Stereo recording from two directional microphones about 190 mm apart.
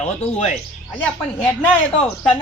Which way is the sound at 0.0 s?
35° left (ahead or behind).